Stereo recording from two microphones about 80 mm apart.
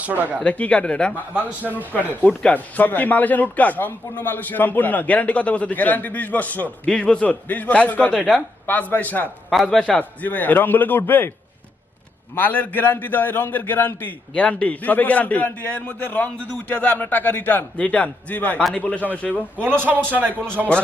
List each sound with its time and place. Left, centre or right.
0.4 s a man's voice: centre
8.1 s a man's voice: centre
8.6 s a man's voice: left
9.6 s a man's voice: centre
10.0 s a man's voice: left
12.4 s a man's voice: left
19.6 s speech: right